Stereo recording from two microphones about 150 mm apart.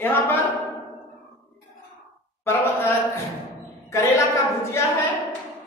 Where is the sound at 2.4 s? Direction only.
15° left (ahead or behind).